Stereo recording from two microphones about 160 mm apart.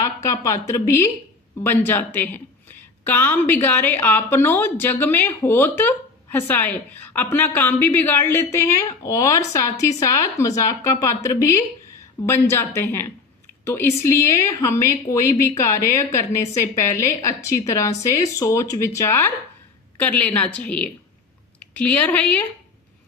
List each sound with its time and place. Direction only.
0.0 s a woman's voice: 20° left (ahead or behind)